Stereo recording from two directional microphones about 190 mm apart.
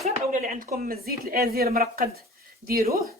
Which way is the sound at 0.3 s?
45° right (ahead or behind).